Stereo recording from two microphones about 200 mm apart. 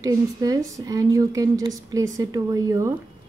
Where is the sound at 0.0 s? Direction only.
15° right (ahead or behind).